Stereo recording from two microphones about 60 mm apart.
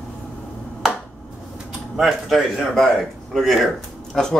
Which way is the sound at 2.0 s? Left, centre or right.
Centre.